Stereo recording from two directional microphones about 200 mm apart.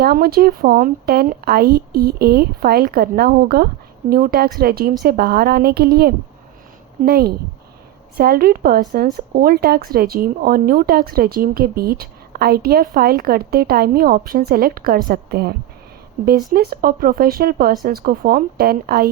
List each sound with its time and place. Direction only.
0.0 s speech: 50° right (ahead or behind)